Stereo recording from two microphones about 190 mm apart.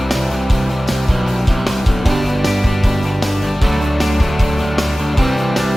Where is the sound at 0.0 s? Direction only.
Centre (ahead or behind).